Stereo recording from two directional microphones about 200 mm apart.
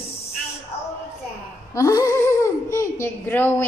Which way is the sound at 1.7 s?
15° left (ahead or behind).